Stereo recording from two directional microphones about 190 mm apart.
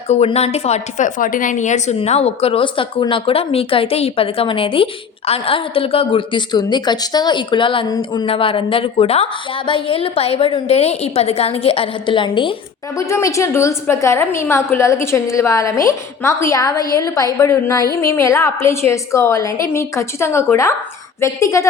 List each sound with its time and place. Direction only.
0.1 s a woman's voice: 35° left (ahead or behind); by 21.7 s 15° left (ahead or behind)